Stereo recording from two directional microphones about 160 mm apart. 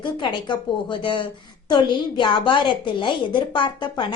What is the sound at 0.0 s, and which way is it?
A woman's voice, 30° left (ahead or behind).